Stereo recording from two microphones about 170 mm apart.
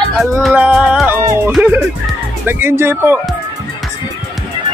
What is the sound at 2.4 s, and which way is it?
Speech, 15° right (ahead or behind).